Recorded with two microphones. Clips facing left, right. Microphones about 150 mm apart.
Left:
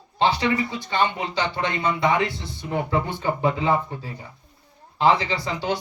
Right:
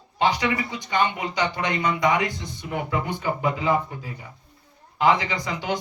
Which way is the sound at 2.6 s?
35° left (ahead or behind).